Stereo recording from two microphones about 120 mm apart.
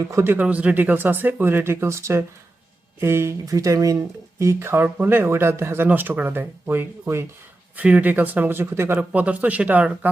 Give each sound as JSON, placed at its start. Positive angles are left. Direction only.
{"t": 0.0, "sound": "speech", "side_deg": -25}